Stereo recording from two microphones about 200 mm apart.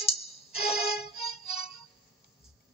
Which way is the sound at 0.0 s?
30° left (ahead or behind).